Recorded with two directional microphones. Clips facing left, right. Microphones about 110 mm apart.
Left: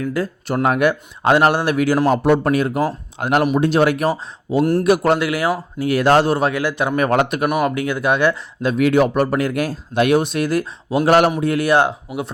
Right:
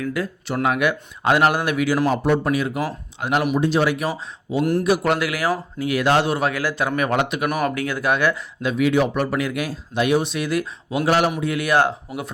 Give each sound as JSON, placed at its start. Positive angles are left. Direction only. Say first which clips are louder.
{"t": 0.0, "sound": "speech", "louder": "left 3 dB", "side_deg": 35}
{"t": 2.0, "sound": "a man's voice", "louder": "left 4 dB", "side_deg": 55}
{"t": 5.0, "sound": "speech", "louder": "left 4 dB", "side_deg": 25}
{"t": 5.8, "sound": "speech", "louder": "left 5 dB", "side_deg": 35}
{"t": 6.5, "sound": "speech", "louder": "left 3 dB", "side_deg": 20}
{"t": 6.9, "sound": "a man's voice", "louder": "left 4 dB", "side_deg": 40}
{"t": 7.4, "sound": "speech", "louder": "left 4 dB", "side_deg": 25}
{"t": 8.8, "sound": "a man's voice", "louder": "left 4 dB", "side_deg": 50}
{"t": 10.0, "sound": "a man's voice", "louder": "left 4 dB", "side_deg": 55}
{"t": 11.0, "sound": "a man's voice", "louder": "left 5 dB", "side_deg": 55}
{"t": 11.3, "sound": "a man's voice", "louder": "left 5 dB", "side_deg": 40}
{"t": 11.6, "sound": "speech", "louder": "left 1 dB", "side_deg": 25}